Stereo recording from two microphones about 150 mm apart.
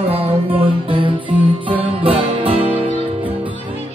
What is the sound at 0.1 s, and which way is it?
Music, 40° right (ahead or behind).